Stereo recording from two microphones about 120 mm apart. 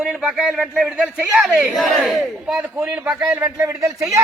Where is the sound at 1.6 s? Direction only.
Centre (ahead or behind).